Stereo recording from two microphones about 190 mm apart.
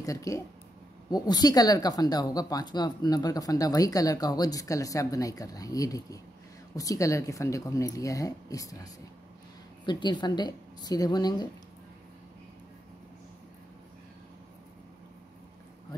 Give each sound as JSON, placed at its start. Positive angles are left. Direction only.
{"t": 0.0, "sound": "speech", "side_deg": 15}
{"t": 9.8, "sound": "speech", "side_deg": 25}